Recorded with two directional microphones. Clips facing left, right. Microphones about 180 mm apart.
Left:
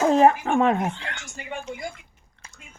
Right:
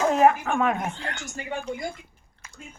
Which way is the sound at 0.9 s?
40° right (ahead or behind).